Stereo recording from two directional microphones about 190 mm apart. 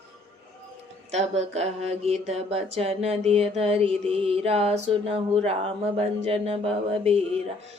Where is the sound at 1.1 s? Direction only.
35° right (ahead or behind).